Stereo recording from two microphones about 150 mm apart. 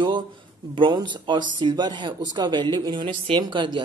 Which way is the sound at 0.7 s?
30° right (ahead or behind).